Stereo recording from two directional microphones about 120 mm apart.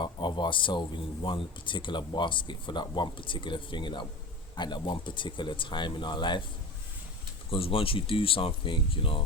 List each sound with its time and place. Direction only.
0.0 s speech: 40° left (ahead or behind)
7.5 s speech: 50° left (ahead or behind)